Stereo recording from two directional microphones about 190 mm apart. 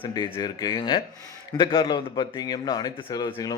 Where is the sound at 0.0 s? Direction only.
25° left (ahead or behind).